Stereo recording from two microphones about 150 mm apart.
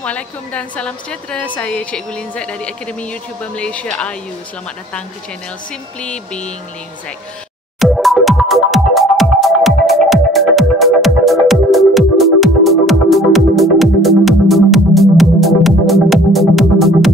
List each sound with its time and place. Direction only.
0.0 s a woman's voice: 10° left (ahead or behind)
5.9 s a woman's voice: 5° left (ahead or behind)
7.8 s music: centre (ahead or behind)